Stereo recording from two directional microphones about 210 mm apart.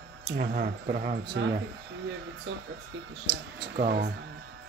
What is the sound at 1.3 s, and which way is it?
Speech, 60° right (ahead or behind).